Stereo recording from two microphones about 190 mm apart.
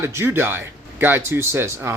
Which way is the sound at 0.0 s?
15° right (ahead or behind).